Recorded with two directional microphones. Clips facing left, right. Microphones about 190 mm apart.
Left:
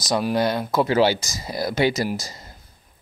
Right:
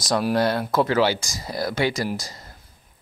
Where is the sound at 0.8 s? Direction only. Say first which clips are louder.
Left 2 dB; 20° left (ahead or behind).